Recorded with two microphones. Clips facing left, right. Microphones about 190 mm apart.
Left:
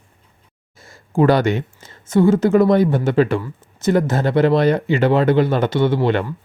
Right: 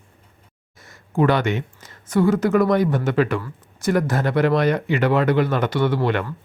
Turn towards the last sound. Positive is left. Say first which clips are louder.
# left 3 dB
turn(degrees=25)  # may be behind; listen again after turning